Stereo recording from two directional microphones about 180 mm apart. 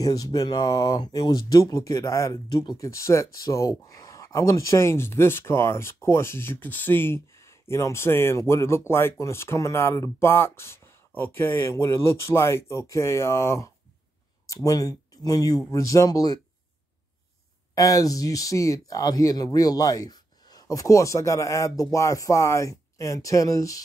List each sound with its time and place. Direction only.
0.0 s speech: 20° left (ahead or behind)
17.7 s speech: 20° left (ahead or behind)